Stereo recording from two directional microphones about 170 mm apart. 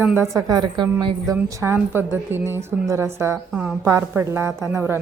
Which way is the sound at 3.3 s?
Centre (ahead or behind).